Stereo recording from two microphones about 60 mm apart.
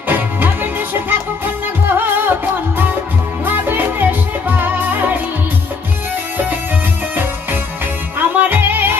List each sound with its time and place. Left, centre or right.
0.1 s music: right
3.4 s music: right
8.2 s music: right